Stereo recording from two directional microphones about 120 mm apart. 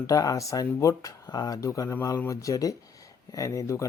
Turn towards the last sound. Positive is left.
turn(degrees=25)  # may be behind; listen again after turning